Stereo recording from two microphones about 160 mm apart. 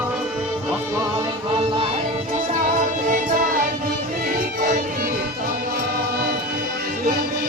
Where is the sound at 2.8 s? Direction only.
55° right (ahead or behind).